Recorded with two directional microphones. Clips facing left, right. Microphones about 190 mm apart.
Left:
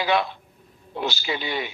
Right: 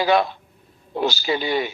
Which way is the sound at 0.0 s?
40° right (ahead or behind).